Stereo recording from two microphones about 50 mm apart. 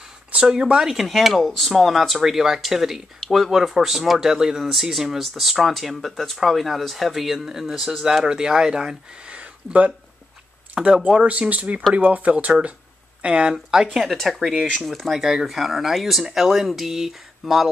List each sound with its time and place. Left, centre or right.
0.3 s speech: centre
1.0 s speech: centre
13.9 s speech: centre